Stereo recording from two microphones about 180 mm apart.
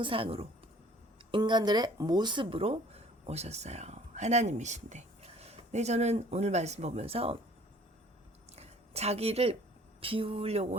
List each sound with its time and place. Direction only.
0.0 s speech: 30° right (ahead or behind)
8.5 s a sound: 35° right (ahead or behind)
10.0 s speech: 30° right (ahead or behind)